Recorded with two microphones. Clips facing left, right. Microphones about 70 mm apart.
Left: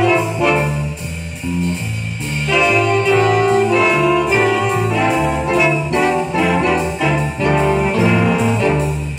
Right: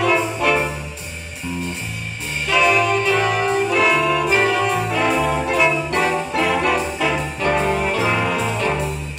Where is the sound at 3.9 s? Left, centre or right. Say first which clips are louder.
Left 3 dB; centre.